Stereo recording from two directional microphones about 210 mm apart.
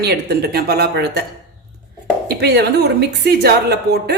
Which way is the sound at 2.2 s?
50° right (ahead or behind).